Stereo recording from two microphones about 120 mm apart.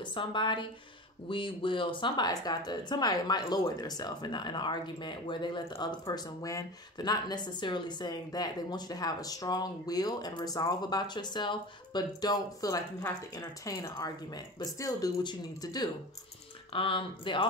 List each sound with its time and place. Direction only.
0.0 s a woman's voice: 40° left (ahead or behind)
16.7 s speech: 50° left (ahead or behind)